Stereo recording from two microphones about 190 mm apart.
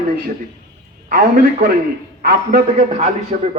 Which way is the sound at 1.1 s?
50° right (ahead or behind).